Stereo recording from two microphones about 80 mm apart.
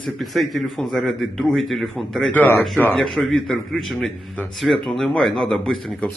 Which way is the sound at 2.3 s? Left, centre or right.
Left.